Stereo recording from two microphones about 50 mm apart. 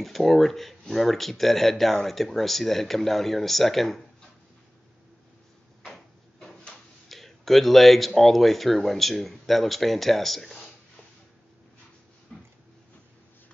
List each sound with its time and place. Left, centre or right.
0.0 s speech: centre
7.1 s speech: centre